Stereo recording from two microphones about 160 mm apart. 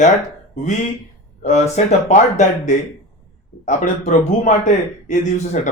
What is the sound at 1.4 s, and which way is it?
A man's voice, 45° left (ahead or behind).